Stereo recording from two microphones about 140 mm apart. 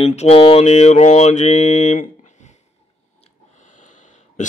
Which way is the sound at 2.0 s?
60° left (ahead or behind).